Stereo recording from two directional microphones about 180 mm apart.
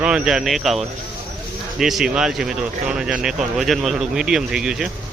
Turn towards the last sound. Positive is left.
turn(degrees=-5)  # may be behind; listen again after turning